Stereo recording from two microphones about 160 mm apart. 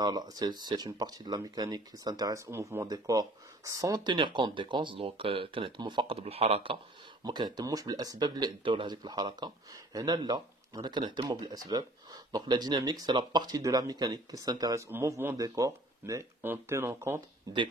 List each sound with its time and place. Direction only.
0.0 s speech: 25° right (ahead or behind)